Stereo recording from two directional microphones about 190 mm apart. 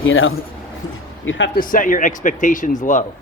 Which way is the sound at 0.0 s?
90° left.